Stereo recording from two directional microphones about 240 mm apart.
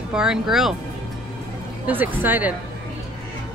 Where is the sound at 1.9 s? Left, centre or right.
Centre.